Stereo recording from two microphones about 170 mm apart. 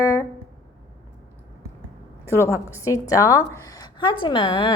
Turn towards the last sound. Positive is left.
turn(degrees=30)  # may be behind; listen again after turning